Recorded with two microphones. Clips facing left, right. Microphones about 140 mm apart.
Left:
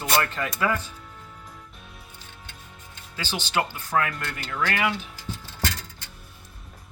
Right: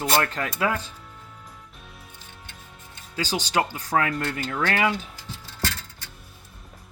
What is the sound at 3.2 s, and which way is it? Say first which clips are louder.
Speech: right 3 dB; 40° right (ahead or behind).